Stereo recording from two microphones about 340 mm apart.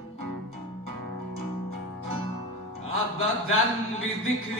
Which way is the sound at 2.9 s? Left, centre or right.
Left.